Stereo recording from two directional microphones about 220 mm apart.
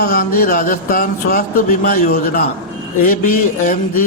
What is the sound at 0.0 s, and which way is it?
A man's voice, 45° left (ahead or behind).